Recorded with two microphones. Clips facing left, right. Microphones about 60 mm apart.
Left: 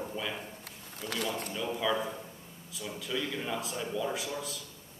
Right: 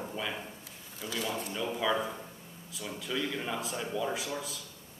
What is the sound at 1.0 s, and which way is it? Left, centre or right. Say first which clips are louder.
Speech: left 1 dB; left.